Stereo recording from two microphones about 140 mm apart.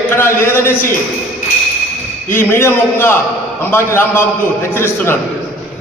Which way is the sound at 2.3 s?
15° left (ahead or behind).